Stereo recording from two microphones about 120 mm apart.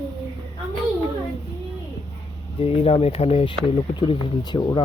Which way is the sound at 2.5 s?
55° left (ahead or behind).